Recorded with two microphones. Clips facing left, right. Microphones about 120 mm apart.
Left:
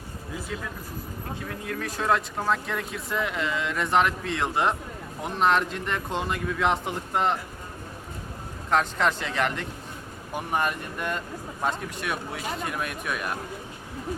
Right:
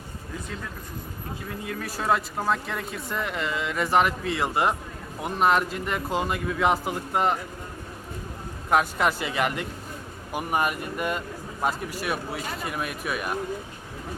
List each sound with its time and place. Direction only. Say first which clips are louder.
1.4 s speech: even; 5° right (ahead or behind)
8.7 s speech: right 1 dB; 10° right (ahead or behind)